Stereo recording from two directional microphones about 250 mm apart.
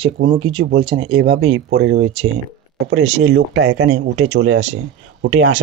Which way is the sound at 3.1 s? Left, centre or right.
Right.